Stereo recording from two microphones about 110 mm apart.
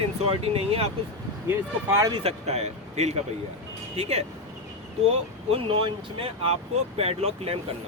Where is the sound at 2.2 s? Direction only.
70° right (ahead or behind).